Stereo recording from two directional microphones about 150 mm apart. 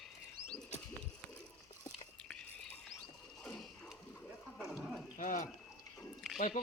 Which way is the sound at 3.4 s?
5° left (ahead or behind).